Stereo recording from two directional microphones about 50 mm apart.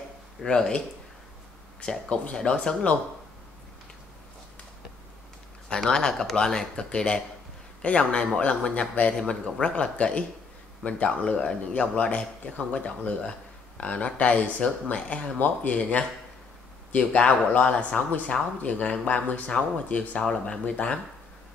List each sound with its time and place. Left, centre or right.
0.4 s speech: centre
5.8 s speech: centre; by 20.2 s left
20.2 s speech: centre